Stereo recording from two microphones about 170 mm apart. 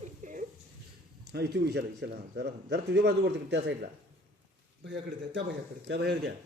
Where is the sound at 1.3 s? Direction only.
75° right (ahead or behind).